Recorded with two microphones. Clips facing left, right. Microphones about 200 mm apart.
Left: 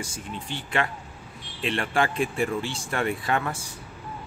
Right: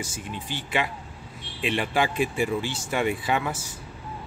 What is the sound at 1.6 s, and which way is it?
Speech, 5° right (ahead or behind).